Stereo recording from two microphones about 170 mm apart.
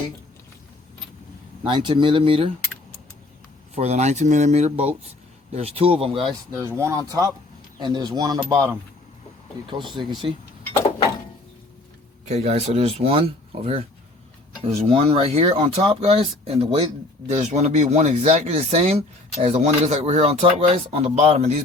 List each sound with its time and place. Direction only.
1.6 s speech: 30° right (ahead or behind)
3.8 s speech: 40° right (ahead or behind)
6.6 s speech: 15° right (ahead or behind)
9.6 s speech: 30° right (ahead or behind)
12.3 s speech: 40° right (ahead or behind)